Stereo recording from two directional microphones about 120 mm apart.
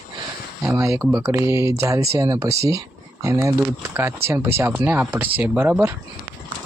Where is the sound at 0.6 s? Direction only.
25° right (ahead or behind).